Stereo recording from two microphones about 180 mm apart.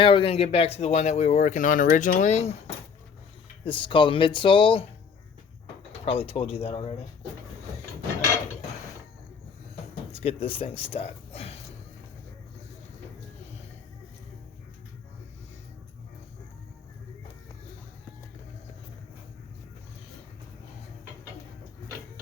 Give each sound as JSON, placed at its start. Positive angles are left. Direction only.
{"t": 0.0, "sound": "speech", "side_deg": 30}
{"t": 6.1, "sound": "speech", "side_deg": 35}
{"t": 10.1, "sound": "speech", "side_deg": 30}